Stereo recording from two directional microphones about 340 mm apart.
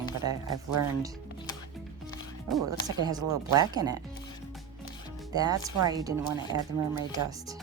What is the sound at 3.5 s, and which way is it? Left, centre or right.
Speech, centre.